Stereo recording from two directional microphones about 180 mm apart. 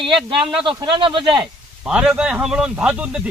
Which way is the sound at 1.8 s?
5° right (ahead or behind).